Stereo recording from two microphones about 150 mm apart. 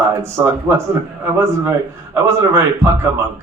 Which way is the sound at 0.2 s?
20° right (ahead or behind).